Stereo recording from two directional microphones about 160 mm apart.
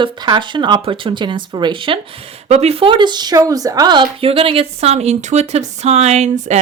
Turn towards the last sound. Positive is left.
turn(degrees=-45)  # may be behind; listen again after turning